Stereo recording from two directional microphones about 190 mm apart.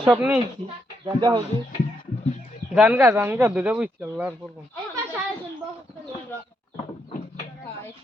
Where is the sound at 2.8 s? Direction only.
5° right (ahead or behind).